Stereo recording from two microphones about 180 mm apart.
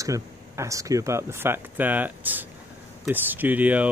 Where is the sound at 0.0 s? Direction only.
15° right (ahead or behind).